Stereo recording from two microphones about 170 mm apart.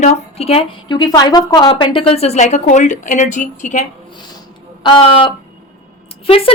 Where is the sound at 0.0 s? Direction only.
35° left (ahead or behind).